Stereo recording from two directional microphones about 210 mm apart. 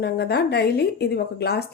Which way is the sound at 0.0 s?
50° left (ahead or behind).